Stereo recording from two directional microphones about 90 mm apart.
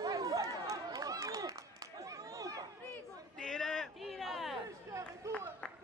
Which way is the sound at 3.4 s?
5° left (ahead or behind).